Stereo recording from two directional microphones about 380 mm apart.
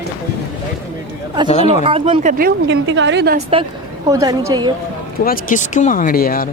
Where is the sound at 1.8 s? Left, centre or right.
Centre.